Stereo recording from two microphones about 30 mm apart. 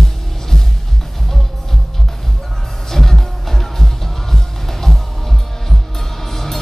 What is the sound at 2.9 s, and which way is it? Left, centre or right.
Music, centre.